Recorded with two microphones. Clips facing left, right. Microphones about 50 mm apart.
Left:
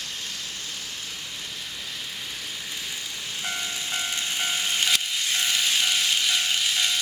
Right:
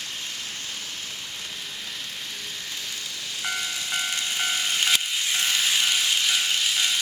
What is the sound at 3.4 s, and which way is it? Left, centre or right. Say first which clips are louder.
Vehicle: right 2 dB; centre.